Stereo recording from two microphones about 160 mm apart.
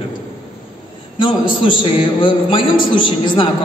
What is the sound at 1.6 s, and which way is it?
A woman's voice, 30° left (ahead or behind).